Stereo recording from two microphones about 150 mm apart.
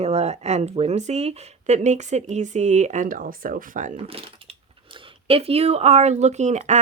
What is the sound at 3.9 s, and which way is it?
Speech, 40° right (ahead or behind).